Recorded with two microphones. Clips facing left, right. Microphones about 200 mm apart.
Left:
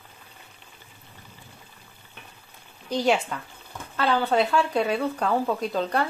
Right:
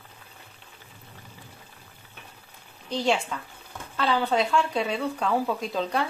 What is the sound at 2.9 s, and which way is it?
A woman's voice, 10° left (ahead or behind).